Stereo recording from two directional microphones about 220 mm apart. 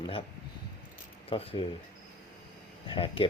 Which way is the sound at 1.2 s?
25° left (ahead or behind).